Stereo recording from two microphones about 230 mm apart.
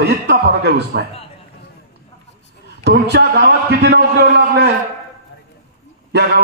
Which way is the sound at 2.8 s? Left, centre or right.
Right.